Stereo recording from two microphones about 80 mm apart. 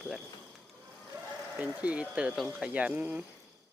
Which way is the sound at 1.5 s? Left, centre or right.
Centre.